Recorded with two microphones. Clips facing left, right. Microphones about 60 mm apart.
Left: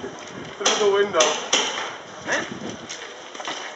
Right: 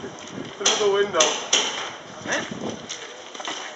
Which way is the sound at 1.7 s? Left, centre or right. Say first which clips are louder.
Left 2 dB; centre.